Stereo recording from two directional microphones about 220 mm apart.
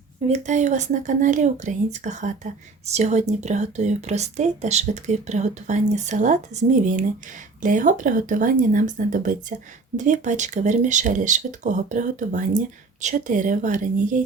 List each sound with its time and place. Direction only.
0.3 s speech: 30° right (ahead or behind)